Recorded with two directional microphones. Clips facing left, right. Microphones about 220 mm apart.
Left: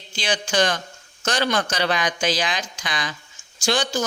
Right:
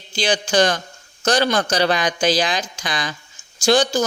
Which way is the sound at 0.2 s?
35° right (ahead or behind).